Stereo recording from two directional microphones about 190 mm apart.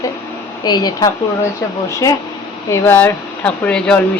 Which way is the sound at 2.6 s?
15° left (ahead or behind).